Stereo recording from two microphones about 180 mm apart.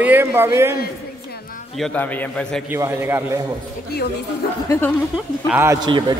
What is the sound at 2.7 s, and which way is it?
Speech, 10° right (ahead or behind).